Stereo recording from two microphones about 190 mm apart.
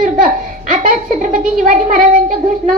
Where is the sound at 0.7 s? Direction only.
45° right (ahead or behind).